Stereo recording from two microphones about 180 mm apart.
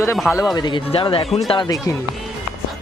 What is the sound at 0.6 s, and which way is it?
Speech, 25° left (ahead or behind).